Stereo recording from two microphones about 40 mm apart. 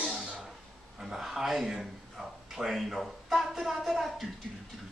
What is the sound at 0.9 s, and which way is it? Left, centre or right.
A man's voice, centre.